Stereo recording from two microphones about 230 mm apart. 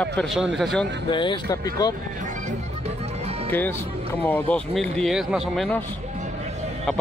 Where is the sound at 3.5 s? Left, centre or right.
Centre.